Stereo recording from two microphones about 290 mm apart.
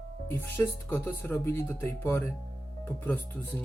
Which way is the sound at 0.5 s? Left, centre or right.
Centre.